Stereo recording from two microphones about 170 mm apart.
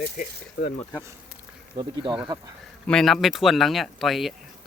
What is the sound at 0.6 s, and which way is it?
Speech, 80° left.